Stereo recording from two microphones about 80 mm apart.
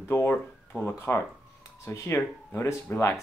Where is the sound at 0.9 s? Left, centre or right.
Left.